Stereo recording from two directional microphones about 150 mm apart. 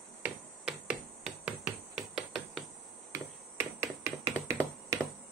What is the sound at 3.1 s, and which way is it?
Finger snapping, 15° right (ahead or behind).